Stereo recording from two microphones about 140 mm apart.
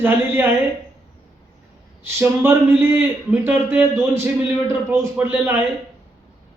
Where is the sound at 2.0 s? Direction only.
15° right (ahead or behind).